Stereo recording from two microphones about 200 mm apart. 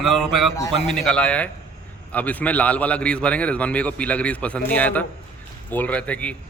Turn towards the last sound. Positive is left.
turn(degrees=5)  # may be behind; listen again after turning